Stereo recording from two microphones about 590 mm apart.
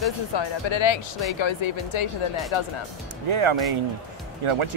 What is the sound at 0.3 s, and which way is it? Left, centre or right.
Speech, left.